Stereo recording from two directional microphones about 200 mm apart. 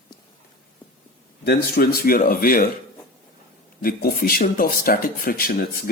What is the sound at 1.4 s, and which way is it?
Speech, 50° left (ahead or behind).